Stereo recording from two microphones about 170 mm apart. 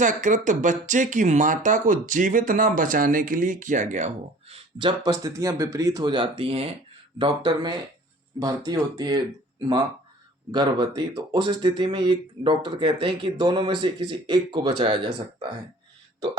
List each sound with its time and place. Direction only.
0.0 s speech: 45° right (ahead or behind); by 15.1 s 30° right (ahead or behind)